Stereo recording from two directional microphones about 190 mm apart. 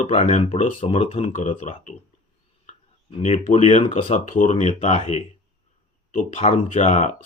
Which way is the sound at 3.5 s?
35° left (ahead or behind).